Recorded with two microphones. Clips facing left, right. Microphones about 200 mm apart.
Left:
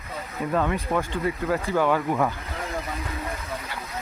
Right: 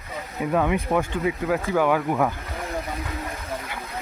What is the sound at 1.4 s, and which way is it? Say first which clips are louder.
Speech: even; centre (ahead or behind).